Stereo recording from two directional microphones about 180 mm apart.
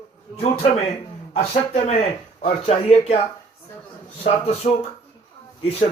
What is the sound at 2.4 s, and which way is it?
Speech, 35° left (ahead or behind).